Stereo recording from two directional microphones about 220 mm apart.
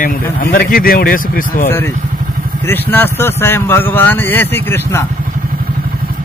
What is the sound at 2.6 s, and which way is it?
Speech, 10° left (ahead or behind).